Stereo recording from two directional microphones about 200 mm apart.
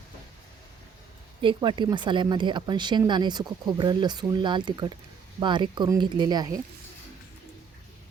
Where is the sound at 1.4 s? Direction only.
25° right (ahead or behind).